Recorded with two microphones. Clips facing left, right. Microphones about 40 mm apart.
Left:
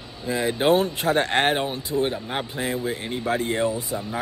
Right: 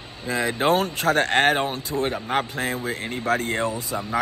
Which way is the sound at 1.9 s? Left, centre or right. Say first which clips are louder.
Left 3 dB; right.